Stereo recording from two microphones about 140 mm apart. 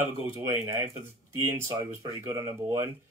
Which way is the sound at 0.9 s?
20° right (ahead or behind).